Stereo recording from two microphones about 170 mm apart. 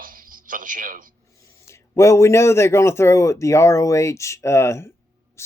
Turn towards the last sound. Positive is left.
turn(degrees=15)  # may be behind; listen again after turning